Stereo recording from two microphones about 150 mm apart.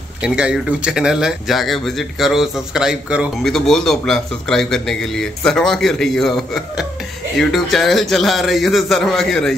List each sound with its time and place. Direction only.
0.2 s speech: 5° right (ahead or behind)